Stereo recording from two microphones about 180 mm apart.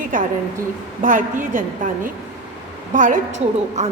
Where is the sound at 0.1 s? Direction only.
45° right (ahead or behind).